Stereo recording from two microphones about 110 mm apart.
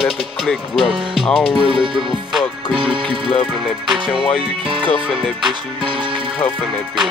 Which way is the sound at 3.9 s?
5° right (ahead or behind).